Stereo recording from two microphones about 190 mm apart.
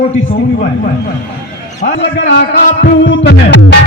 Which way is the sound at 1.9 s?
75° left (ahead or behind).